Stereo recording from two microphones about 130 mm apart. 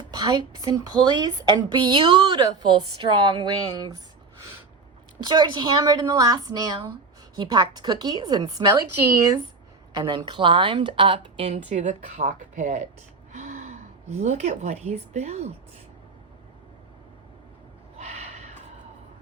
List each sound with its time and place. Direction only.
0.1 s a woman's voice: 30° right (ahead or behind)
5.2 s a woman's voice: 35° right (ahead or behind)
9.9 s a woman's voice: 35° right (ahead or behind); by 15.5 s 55° right (ahead or behind)
17.9 s snort: 55° right (ahead or behind)